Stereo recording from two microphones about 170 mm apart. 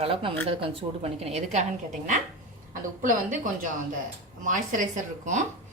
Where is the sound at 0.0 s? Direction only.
30° right (ahead or behind).